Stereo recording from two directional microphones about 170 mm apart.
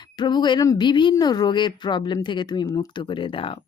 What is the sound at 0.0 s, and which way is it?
Speech, 25° left (ahead or behind).